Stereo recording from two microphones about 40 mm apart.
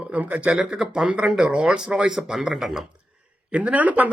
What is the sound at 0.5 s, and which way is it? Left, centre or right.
Speech, right.